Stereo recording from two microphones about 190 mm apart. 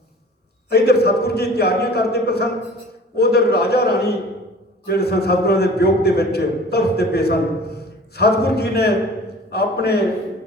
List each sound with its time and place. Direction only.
0.7 s a man's voice: 55° left (ahead or behind)